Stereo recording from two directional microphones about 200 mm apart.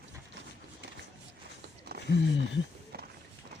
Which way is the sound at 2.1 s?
60° left (ahead or behind).